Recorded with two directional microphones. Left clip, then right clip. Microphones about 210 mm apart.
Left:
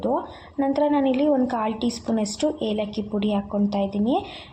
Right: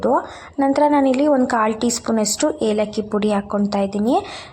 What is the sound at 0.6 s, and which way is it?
A woman's voice, 15° right (ahead or behind).